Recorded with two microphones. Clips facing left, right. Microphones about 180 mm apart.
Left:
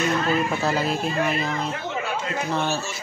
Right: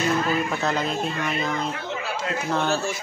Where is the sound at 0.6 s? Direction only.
5° left (ahead or behind).